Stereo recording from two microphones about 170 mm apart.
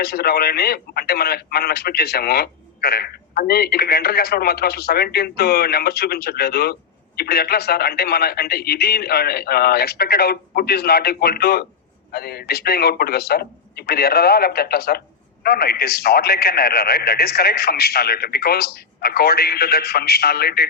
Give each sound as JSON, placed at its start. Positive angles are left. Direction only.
{"t": 0.0, "sound": "a man's voice", "side_deg": 65}